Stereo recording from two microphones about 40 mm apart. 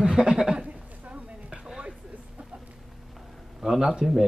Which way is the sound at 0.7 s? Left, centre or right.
Right.